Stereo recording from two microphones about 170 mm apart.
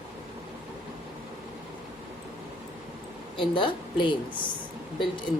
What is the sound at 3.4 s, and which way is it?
A woman's voice, 30° left (ahead or behind).